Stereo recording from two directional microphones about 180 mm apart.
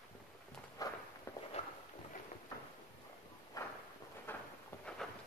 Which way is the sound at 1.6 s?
35° left (ahead or behind).